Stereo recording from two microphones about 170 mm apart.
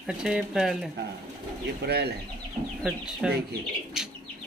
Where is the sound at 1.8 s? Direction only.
70° right (ahead or behind).